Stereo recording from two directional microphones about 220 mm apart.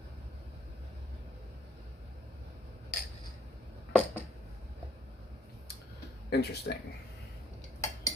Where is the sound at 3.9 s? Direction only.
5° right (ahead or behind).